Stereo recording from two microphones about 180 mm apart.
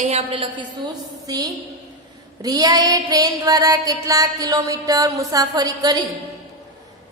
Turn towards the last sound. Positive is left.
turn(degrees=-20)  # may be behind; listen again after turning